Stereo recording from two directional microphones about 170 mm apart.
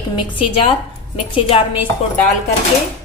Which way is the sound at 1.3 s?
30° left (ahead or behind).